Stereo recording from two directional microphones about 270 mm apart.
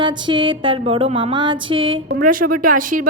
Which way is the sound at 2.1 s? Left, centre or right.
Right.